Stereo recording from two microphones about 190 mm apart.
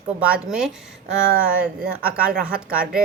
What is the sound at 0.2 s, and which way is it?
Speech, 5° right (ahead or behind).